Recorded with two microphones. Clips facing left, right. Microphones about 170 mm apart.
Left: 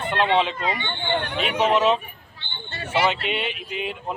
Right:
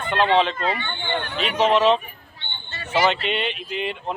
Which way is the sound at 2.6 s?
55° left (ahead or behind).